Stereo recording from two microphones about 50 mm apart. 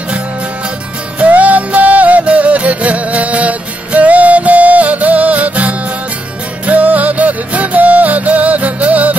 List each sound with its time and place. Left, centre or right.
1.2 s music: right